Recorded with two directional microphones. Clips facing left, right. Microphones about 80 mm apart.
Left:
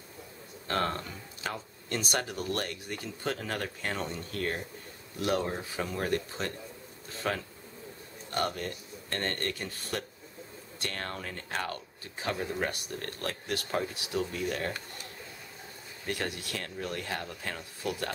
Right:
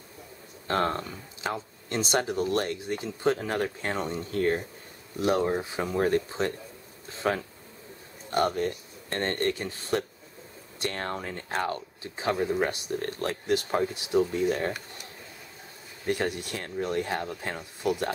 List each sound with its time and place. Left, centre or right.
0.7 s speech: right
16.1 s speech: right